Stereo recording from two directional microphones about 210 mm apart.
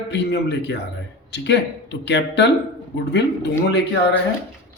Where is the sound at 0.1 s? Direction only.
55° left (ahead or behind).